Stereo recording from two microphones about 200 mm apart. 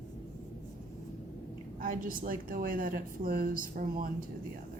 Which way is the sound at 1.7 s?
45° right (ahead or behind).